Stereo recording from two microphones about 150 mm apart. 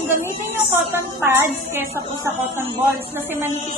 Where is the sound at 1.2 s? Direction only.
15° right (ahead or behind).